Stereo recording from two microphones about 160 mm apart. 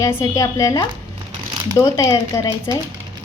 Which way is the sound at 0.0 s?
15° left (ahead or behind).